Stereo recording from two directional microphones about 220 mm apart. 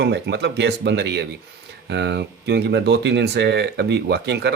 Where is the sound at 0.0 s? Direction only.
50° right (ahead or behind).